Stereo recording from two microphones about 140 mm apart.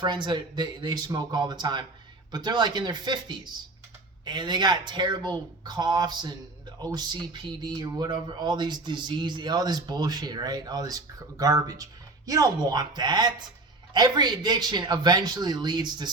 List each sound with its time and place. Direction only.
0.0 s speech: 30° right (ahead or behind)